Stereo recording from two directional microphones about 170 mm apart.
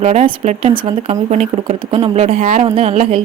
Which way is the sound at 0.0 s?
45° right (ahead or behind).